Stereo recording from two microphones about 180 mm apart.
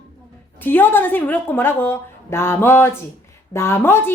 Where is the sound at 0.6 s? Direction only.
10° left (ahead or behind).